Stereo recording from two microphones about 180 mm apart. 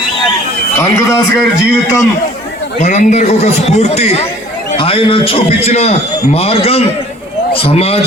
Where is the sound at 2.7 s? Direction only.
40° left (ahead or behind).